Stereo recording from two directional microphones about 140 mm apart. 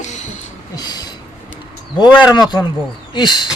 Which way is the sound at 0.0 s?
55° left (ahead or behind).